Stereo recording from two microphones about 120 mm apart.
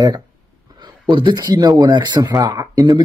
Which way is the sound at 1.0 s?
40° right (ahead or behind).